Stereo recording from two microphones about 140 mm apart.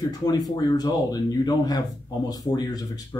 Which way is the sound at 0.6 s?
30° left (ahead or behind).